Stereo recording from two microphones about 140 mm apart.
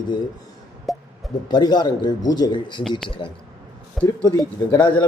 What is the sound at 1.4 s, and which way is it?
A man's voice, 30° left (ahead or behind).